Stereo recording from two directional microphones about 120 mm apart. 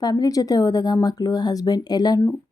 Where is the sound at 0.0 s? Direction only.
35° left (ahead or behind).